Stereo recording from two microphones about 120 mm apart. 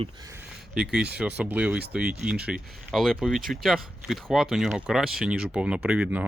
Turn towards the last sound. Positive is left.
turn(degrees=-10)  # may be behind; listen again after turning